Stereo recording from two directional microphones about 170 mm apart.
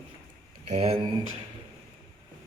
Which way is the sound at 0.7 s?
35° right (ahead or behind).